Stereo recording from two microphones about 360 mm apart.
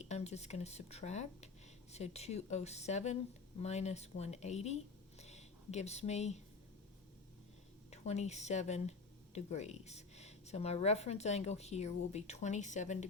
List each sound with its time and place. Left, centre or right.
0.0 s speech: centre
7.9 s speech: centre